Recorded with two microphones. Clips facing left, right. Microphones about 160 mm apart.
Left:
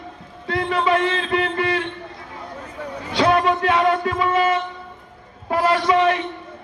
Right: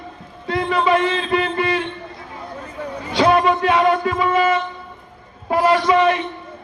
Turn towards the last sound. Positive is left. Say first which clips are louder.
# right 2 dB
turn(degrees=-15)  # may be behind; listen again after turning